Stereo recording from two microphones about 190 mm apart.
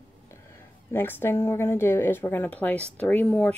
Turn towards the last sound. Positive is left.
turn(degrees=5)  # may be behind; listen again after turning